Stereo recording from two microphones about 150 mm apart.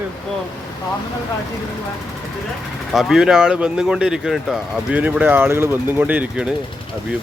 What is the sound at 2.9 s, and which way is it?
Speech, 5° right (ahead or behind).